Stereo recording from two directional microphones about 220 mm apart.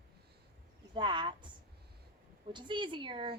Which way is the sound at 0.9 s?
20° right (ahead or behind).